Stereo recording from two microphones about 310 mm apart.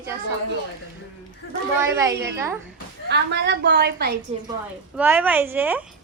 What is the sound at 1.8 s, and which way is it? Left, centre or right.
Speech, centre.